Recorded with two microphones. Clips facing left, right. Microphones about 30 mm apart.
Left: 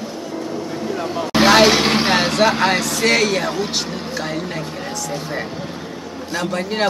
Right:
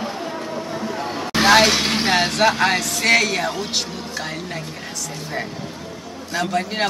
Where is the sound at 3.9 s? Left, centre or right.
Centre.